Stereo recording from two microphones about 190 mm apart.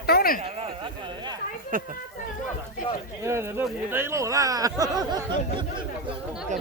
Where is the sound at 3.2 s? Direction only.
15° right (ahead or behind).